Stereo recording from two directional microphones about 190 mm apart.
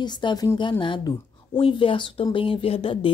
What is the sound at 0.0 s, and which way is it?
A woman's voice, 25° left (ahead or behind).